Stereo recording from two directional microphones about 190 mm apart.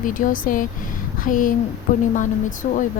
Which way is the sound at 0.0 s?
45° left (ahead or behind).